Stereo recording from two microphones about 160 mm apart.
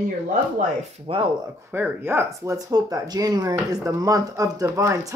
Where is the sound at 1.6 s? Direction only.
10° right (ahead or behind).